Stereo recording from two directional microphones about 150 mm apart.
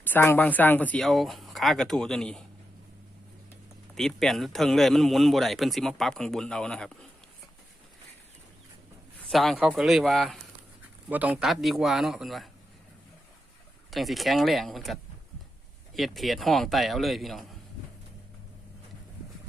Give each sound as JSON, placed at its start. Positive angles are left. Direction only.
{"t": 0.0, "sound": "speech", "side_deg": 15}
{"t": 3.9, "sound": "speech", "side_deg": 0}
{"t": 9.3, "sound": "speech", "side_deg": 0}
{"t": 11.1, "sound": "speech", "side_deg": -10}
{"t": 13.9, "sound": "speech", "side_deg": 0}
{"t": 16.0, "sound": "speech", "side_deg": 0}